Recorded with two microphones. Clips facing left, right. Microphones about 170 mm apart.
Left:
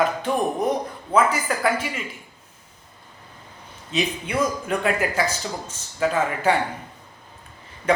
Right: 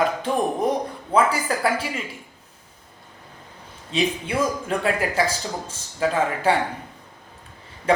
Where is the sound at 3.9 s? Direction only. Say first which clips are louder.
Right 2 dB; 30° right (ahead or behind).